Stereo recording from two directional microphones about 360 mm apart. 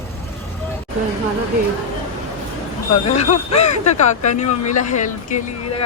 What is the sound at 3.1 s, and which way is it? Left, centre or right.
Speech, centre.